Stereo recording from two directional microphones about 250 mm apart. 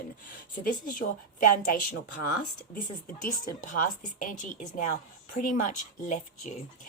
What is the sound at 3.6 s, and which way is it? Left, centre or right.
Speech, left.